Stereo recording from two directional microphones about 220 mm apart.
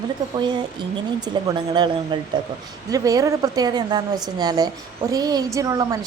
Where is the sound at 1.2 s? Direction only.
20° right (ahead or behind).